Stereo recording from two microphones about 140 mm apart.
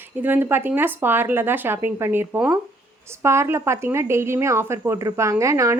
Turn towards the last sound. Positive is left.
turn(degrees=-20)  # may be behind; listen again after turning